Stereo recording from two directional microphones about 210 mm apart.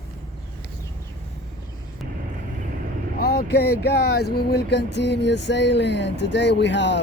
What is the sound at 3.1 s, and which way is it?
Speech, 45° left (ahead or behind).